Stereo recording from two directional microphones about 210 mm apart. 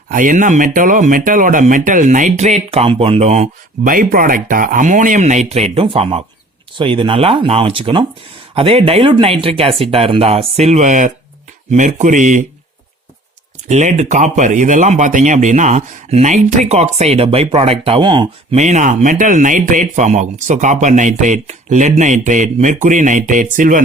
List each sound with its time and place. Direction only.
0.1 s speech: 40° right (ahead or behind)
13.7 s speech: 35° right (ahead or behind)
18.6 s speech: 35° right (ahead or behind)